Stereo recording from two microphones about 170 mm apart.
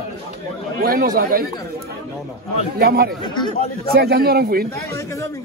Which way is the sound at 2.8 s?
65° right (ahead or behind).